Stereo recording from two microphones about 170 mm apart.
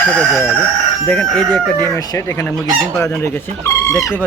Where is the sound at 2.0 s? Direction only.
15° left (ahead or behind).